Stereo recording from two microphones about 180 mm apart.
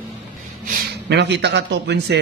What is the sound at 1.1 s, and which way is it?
A man's voice, 70° right (ahead or behind).